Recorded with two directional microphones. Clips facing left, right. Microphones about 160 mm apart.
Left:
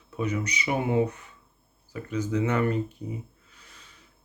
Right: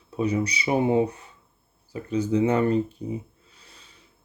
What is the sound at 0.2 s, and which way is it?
Speech, 35° right (ahead or behind).